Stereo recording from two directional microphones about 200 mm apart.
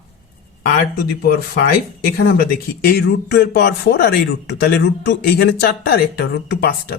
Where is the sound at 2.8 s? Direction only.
50° left (ahead or behind).